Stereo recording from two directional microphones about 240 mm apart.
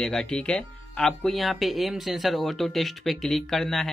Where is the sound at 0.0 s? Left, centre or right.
Centre.